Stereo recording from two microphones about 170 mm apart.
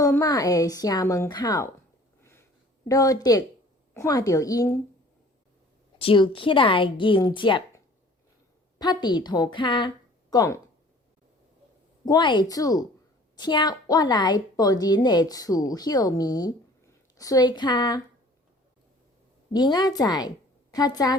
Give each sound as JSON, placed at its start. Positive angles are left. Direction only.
{"t": 0.0, "sound": "a woman's voice", "side_deg": 20}
{"t": 2.9, "sound": "a woman's voice", "side_deg": 20}
{"t": 6.0, "sound": "a woman's voice", "side_deg": 30}
{"t": 8.8, "sound": "a woman's voice", "side_deg": 25}
{"t": 12.0, "sound": "a woman's voice", "side_deg": 25}
{"t": 19.5, "sound": "a woman's voice", "side_deg": 25}